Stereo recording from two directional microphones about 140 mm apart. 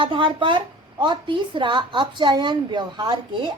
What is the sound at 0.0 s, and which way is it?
Speech, 35° right (ahead or behind).